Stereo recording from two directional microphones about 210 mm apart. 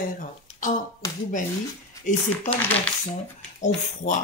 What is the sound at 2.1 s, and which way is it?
Speech, 35° left (ahead or behind).